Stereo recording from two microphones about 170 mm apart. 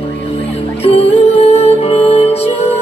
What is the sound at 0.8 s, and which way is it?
Music, 35° left (ahead or behind).